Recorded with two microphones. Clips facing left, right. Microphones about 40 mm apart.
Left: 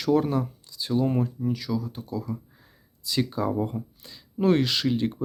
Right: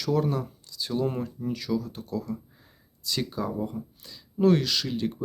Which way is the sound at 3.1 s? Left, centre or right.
Centre.